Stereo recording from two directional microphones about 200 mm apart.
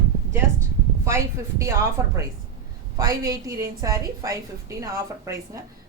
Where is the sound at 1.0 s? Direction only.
15° right (ahead or behind).